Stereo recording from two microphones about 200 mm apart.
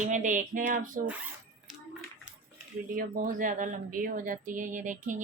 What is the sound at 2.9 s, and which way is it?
Speech, 45° right (ahead or behind).